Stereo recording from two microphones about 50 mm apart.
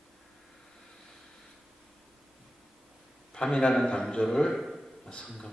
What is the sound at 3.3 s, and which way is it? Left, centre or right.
A man's voice, centre.